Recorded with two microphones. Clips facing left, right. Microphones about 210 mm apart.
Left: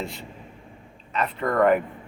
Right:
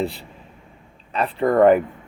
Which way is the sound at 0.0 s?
35° right (ahead or behind).